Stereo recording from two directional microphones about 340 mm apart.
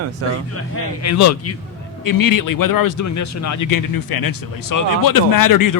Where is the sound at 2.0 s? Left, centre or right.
Left.